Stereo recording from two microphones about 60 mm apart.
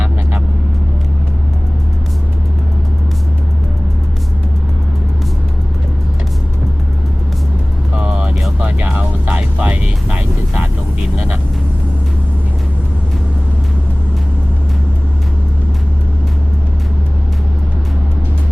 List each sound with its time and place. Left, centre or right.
7.9 s vehicle: centre
8.5 s music: right